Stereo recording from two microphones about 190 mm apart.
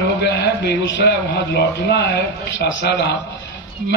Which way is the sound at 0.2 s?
60° left (ahead or behind).